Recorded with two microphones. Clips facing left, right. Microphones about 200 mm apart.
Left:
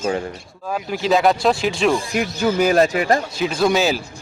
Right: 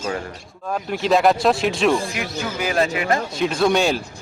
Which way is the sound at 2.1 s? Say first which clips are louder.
Left 8 dB; 45° left (ahead or behind).